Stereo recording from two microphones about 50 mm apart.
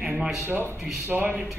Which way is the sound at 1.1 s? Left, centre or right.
Right.